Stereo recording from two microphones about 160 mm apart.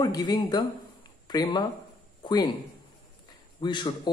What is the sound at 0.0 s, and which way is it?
Speech, 25° left (ahead or behind).